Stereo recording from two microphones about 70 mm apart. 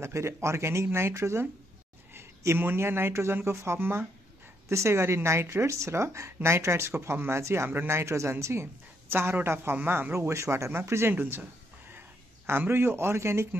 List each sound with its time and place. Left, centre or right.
0.0 s speech: right
12.4 s speech: right